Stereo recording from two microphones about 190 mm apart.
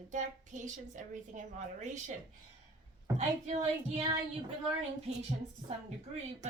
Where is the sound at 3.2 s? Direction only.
35° right (ahead or behind).